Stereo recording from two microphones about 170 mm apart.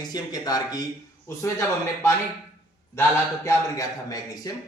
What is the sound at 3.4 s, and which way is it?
Speech, 20° left (ahead or behind).